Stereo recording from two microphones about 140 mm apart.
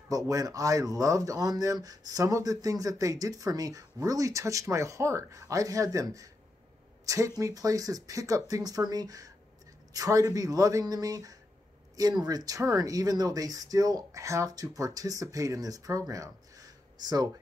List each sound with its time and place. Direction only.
0.1 s speech: 25° right (ahead or behind)